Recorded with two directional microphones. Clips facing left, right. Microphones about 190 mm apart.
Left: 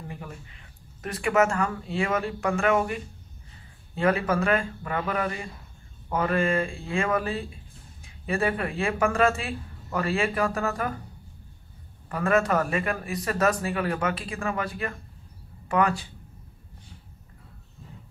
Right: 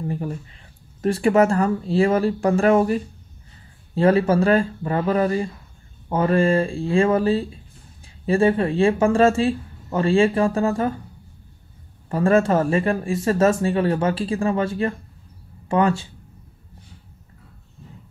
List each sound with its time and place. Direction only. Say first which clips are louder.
0.1 s speech: right 12 dB; 35° right (ahead or behind)
12.1 s speech: right 6 dB; 30° right (ahead or behind)